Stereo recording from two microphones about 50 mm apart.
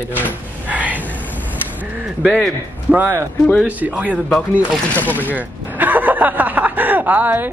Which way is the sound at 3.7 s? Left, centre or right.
Right.